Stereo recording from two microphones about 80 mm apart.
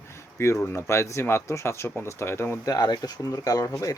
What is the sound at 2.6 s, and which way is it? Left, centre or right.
Speech, left.